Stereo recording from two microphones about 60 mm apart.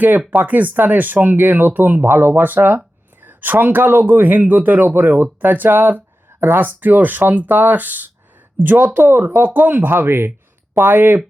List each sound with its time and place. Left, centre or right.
0.3 s a man's voice: right